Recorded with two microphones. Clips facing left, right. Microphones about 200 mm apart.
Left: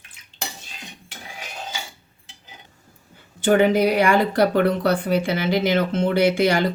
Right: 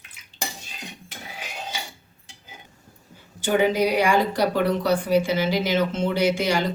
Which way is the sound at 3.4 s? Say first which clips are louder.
Left 4 dB; 60° left (ahead or behind).